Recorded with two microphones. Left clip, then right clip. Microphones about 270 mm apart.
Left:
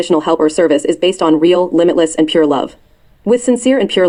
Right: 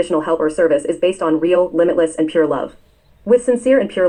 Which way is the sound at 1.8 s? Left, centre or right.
Left.